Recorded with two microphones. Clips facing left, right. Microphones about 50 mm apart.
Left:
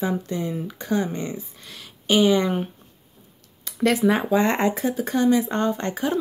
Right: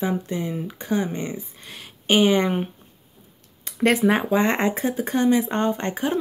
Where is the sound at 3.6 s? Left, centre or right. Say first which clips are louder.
Right 1 dB; right.